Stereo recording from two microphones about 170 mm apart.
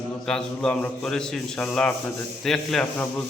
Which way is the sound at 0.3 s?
5° left (ahead or behind).